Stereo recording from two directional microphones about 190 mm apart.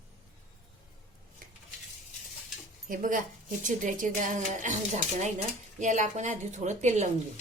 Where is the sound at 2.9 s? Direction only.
45° right (ahead or behind).